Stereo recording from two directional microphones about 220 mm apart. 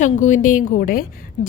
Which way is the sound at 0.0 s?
35° left (ahead or behind).